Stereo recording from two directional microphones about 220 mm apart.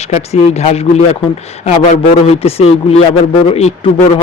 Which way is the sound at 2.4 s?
25° left (ahead or behind).